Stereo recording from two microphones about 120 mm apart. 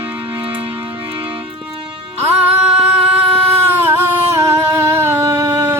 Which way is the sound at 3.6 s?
20° right (ahead or behind).